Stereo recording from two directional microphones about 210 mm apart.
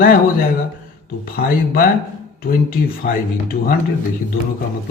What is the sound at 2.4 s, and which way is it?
Speech, 45° left (ahead or behind).